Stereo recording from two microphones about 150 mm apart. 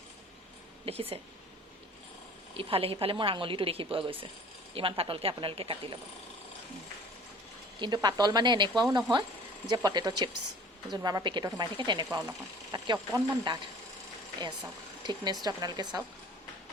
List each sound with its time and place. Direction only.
0.9 s a woman's voice: 40° right (ahead or behind)
2.6 s a woman's voice: 40° right (ahead or behind)
7.8 s a woman's voice: 25° right (ahead or behind)
15.0 s a woman's voice: 30° right (ahead or behind)